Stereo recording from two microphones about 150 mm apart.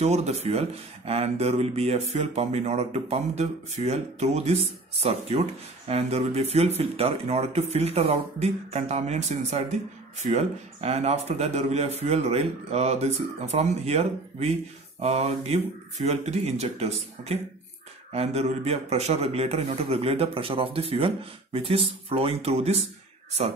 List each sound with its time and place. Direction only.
0.0 s speech: 45° right (ahead or behind)